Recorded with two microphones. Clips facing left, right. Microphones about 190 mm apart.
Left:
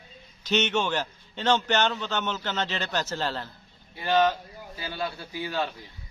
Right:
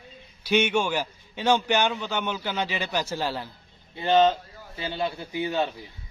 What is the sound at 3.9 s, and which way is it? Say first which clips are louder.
A man's voice: right 3 dB; 20° right (ahead or behind).